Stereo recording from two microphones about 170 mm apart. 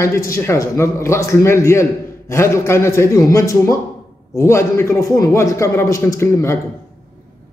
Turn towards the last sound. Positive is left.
turn(degrees=15)  # may be behind; listen again after turning